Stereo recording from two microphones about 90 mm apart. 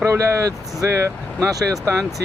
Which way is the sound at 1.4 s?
35° right (ahead or behind).